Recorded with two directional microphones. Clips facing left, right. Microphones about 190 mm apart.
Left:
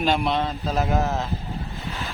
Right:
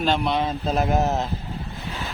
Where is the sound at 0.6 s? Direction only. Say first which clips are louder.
Right 3 dB; 20° right (ahead or behind).